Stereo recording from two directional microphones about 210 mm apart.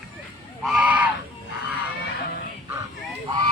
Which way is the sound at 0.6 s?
5° right (ahead or behind).